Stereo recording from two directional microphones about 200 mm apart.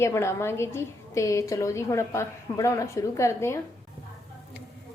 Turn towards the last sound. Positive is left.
turn(degrees=15)  # may be behind; listen again after turning